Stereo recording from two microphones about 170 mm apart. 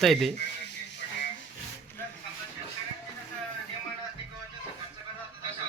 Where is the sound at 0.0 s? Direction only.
Centre (ahead or behind).